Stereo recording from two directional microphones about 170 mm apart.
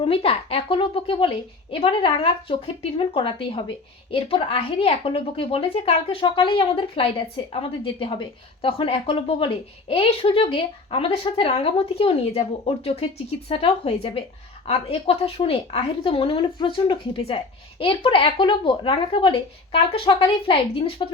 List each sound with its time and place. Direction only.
0.0 s speech: 35° left (ahead or behind)